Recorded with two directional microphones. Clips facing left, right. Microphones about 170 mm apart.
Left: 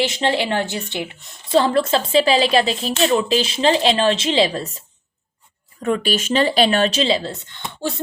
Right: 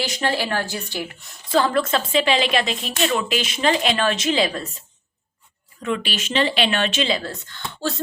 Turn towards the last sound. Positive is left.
turn(degrees=20)  # may be behind; listen again after turning